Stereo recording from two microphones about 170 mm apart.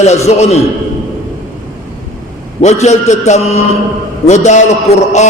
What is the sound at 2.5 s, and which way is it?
A man's voice, 40° left (ahead or behind).